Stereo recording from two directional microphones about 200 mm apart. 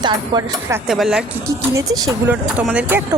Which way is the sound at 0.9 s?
Centre (ahead or behind).